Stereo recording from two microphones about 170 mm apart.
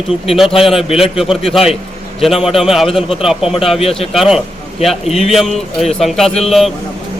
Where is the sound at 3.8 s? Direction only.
35° left (ahead or behind).